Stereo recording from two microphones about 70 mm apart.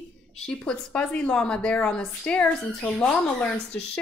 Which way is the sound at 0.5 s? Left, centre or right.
Centre.